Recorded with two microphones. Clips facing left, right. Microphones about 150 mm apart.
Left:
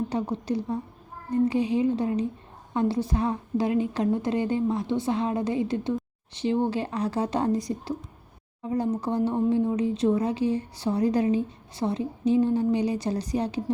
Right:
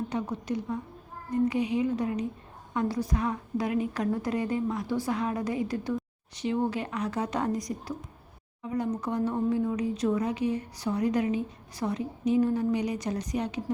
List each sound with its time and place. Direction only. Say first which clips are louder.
0.1 s a woman's voice: left 4 dB; 30° left (ahead or behind)